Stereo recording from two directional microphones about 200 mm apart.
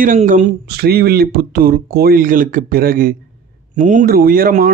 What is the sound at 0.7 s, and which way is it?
Speech, 50° right (ahead or behind).